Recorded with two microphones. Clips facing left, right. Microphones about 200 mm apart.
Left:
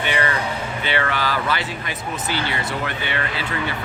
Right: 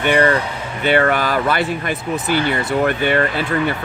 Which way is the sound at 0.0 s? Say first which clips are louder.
Right 7 dB; 50° right (ahead or behind).